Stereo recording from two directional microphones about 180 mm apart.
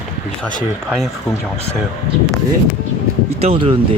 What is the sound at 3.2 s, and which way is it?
Speech, 35° right (ahead or behind).